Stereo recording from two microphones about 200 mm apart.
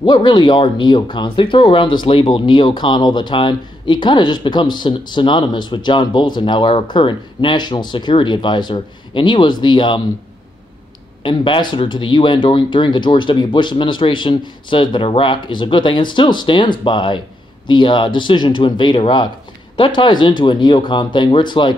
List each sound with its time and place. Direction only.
0.0 s speech: 20° left (ahead or behind)
11.2 s speech: 25° left (ahead or behind)